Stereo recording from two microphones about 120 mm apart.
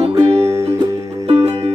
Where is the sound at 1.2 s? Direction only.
55° right (ahead or behind).